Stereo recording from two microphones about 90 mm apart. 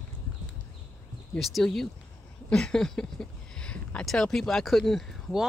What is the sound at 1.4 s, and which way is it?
Speech, centre (ahead or behind).